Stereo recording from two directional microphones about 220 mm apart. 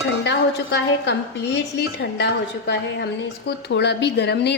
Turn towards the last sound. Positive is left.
turn(degrees=50)  # may be behind; listen again after turning